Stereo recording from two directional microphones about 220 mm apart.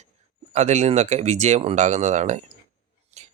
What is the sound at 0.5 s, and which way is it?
Speech, 30° right (ahead or behind).